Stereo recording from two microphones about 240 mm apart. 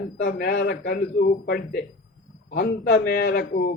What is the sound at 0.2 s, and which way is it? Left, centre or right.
A man's voice, left.